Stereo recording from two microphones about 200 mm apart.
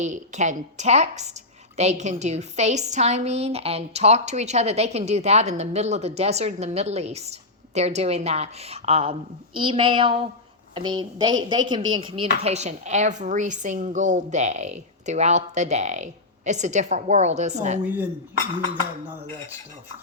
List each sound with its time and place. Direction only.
0.0 s a woman's voice: 35° right (ahead or behind)
17.8 s speech: 10° right (ahead or behind)